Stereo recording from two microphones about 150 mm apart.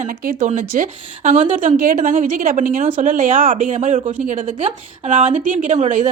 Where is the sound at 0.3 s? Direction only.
65° right (ahead or behind).